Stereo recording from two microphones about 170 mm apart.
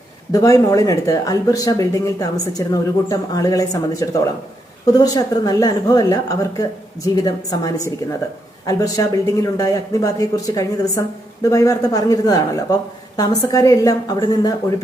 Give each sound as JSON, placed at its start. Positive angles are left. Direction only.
{"t": 0.3, "sound": "speech", "side_deg": 20}